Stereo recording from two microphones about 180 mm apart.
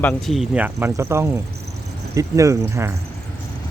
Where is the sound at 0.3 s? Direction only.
5° right (ahead or behind).